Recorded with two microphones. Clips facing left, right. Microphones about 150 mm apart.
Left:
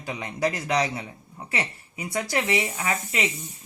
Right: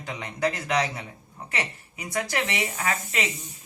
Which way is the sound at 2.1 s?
25° left (ahead or behind).